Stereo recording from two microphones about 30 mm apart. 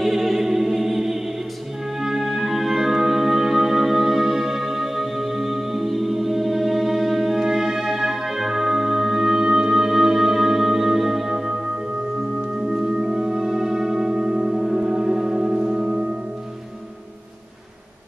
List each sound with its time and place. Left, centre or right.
0.0 s choir: centre
2.0 s music: centre
12.5 s singing bowl: centre
14.8 s music: right